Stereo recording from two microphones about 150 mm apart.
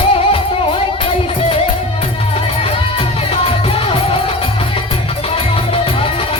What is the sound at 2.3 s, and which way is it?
Music, 40° left (ahead or behind).